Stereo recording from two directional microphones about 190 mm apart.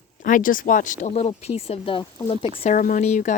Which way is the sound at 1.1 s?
30° left (ahead or behind).